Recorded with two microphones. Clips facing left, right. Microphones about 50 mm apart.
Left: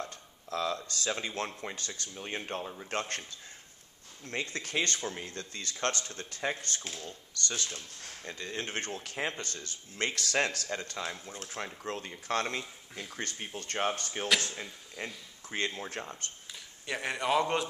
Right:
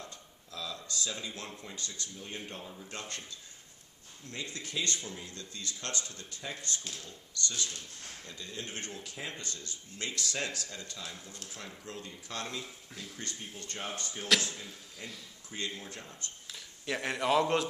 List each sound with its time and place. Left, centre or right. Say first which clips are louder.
0.0 s a sound: left 7 dB; left
1.6 s speech: left 4 dB; left
16.4 s speech: right 2 dB; centre